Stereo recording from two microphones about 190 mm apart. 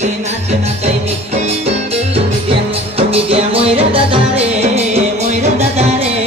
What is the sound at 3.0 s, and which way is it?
Music, 30° right (ahead or behind).